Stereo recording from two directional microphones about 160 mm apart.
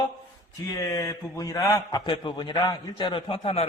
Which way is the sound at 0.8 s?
20° left (ahead or behind).